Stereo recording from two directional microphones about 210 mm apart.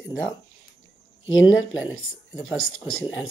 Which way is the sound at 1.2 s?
70° left (ahead or behind).